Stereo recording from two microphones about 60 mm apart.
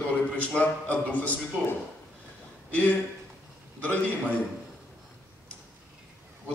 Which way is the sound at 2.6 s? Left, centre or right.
Left.